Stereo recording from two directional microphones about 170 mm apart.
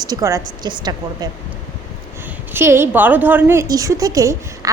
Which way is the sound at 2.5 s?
15° right (ahead or behind).